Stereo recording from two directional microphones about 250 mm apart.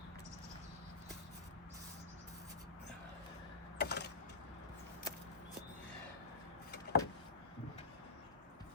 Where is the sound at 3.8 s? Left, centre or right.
Left.